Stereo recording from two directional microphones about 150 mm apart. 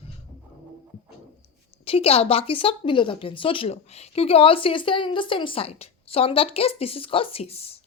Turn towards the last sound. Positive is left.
turn(degrees=40)  # may be behind; listen again after turning